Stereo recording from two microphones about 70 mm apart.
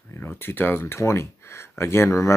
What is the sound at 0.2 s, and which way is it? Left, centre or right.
Speech, left.